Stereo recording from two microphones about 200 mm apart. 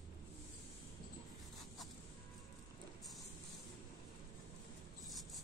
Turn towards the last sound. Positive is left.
turn(degrees=0)  # may be behind; listen again after turning